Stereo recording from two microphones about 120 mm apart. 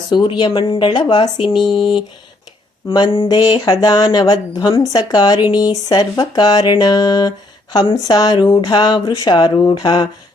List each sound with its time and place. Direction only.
0.1 s speech: 40° left (ahead or behind)